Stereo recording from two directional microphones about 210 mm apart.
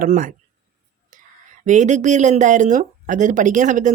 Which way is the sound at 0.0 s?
40° right (ahead or behind).